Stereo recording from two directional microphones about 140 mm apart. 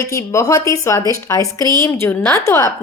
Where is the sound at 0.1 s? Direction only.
25° left (ahead or behind).